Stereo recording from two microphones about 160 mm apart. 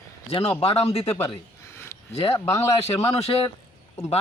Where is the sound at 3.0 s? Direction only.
40° left (ahead or behind).